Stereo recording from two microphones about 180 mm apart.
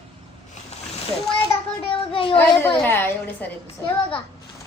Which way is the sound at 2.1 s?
30° left (ahead or behind).